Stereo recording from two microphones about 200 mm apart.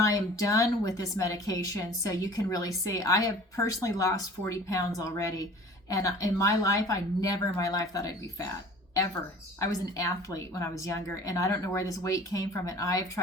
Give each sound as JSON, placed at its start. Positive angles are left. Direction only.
{"t": 0.0, "sound": "a woman's voice", "side_deg": 15}
{"t": 9.6, "sound": "a woman's voice", "side_deg": 15}